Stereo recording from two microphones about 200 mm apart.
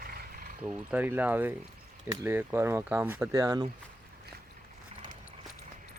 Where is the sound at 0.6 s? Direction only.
5° right (ahead or behind).